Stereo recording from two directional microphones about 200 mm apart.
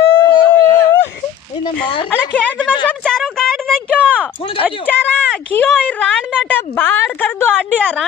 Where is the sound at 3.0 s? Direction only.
Centre (ahead or behind).